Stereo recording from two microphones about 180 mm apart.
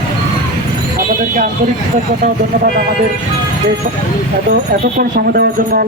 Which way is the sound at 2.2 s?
55° right (ahead or behind).